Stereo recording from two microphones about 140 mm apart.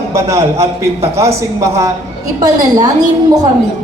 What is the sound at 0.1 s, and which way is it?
A man's voice, 20° right (ahead or behind).